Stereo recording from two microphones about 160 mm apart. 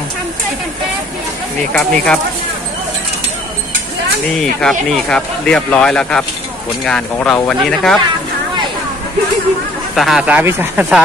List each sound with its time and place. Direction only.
1.7 s speech: 5° left (ahead or behind)
4.4 s speech: 5° left (ahead or behind)
9.9 s speech: centre (ahead or behind)